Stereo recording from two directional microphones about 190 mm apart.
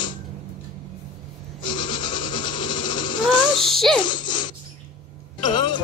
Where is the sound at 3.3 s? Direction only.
25° left (ahead or behind).